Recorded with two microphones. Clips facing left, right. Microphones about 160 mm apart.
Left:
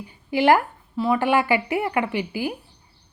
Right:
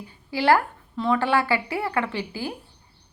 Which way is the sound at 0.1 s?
20° left (ahead or behind).